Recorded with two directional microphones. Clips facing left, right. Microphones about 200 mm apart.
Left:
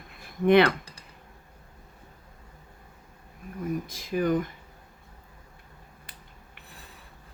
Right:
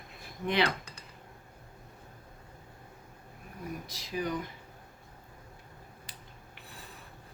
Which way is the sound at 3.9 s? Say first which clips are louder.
Left 8 dB; 50° left (ahead or behind).